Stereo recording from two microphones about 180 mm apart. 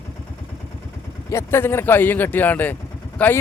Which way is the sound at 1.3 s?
15° left (ahead or behind).